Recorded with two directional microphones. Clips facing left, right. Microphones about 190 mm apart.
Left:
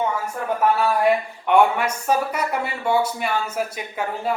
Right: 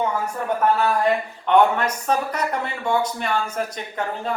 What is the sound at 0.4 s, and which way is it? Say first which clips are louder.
Speech: even; 10° left (ahead or behind).